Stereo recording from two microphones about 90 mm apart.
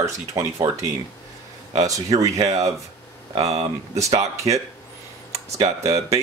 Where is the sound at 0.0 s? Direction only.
35° right (ahead or behind).